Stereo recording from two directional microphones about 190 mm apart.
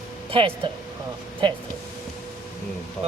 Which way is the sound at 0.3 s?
30° right (ahead or behind).